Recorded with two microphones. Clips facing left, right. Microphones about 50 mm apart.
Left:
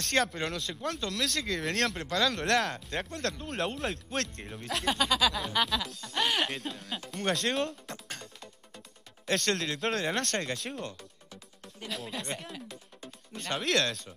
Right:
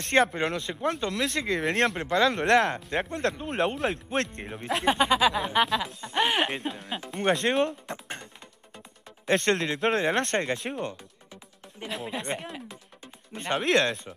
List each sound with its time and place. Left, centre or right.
0.1 s speech: right